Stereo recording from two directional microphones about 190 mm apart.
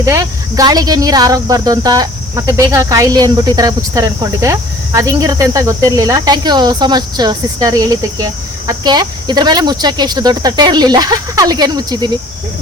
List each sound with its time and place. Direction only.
0.0 s speech: 15° right (ahead or behind)